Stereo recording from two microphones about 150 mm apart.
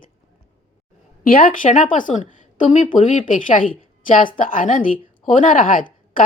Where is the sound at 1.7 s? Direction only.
60° left (ahead or behind).